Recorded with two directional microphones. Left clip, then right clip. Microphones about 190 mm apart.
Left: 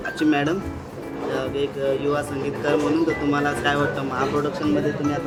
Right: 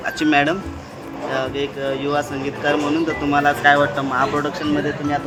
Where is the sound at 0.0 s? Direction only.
15° right (ahead or behind).